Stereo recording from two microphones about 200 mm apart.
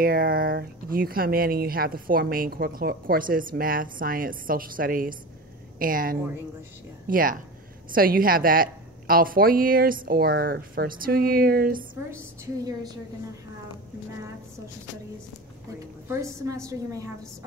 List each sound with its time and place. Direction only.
0.0 s speech: 45° right (ahead or behind)
16.1 s a woman's voice: 15° right (ahead or behind)